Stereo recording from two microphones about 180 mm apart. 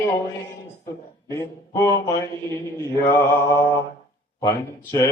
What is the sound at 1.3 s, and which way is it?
Speech, 15° left (ahead or behind).